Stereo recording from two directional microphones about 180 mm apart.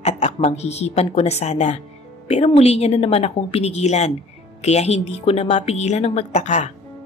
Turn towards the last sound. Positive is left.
turn(degrees=40)  # may be behind; listen again after turning